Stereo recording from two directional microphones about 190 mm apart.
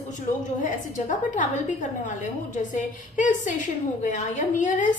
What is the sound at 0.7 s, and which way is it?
A woman's voice, 40° left (ahead or behind).